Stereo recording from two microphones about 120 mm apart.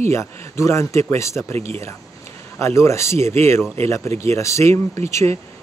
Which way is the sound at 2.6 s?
20° left (ahead or behind).